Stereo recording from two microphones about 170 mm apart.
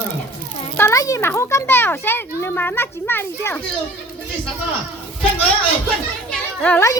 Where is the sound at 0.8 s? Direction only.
20° left (ahead or behind).